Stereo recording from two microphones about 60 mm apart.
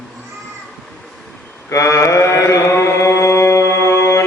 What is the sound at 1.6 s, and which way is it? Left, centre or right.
Mantra, left.